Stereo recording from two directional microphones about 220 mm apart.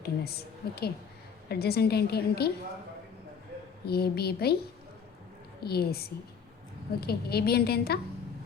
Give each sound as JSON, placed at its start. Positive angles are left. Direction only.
{"t": 0.0, "sound": "a woman's voice", "side_deg": 45}
{"t": 3.8, "sound": "a woman's voice", "side_deg": 45}
{"t": 5.6, "sound": "a woman's voice", "side_deg": 45}